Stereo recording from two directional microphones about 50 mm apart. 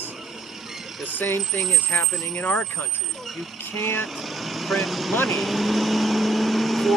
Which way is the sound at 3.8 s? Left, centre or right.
Left.